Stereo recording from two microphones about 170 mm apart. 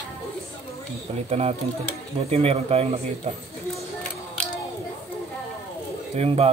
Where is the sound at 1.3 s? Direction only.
40° right (ahead or behind).